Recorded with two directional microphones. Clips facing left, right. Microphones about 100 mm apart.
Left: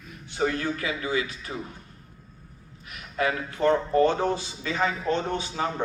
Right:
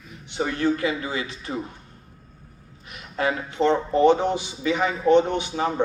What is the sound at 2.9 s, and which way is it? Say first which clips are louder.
Speech: right 2 dB; 25° right (ahead or behind).